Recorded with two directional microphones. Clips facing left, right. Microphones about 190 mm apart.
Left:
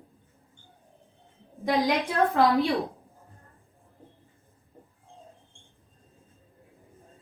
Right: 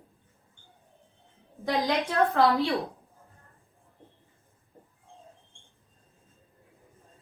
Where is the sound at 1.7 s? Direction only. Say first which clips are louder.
Left 1 dB; 15° left (ahead or behind).